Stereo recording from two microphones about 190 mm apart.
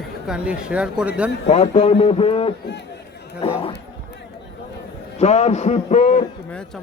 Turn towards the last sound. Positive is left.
turn(degrees=40)  # may be behind; listen again after turning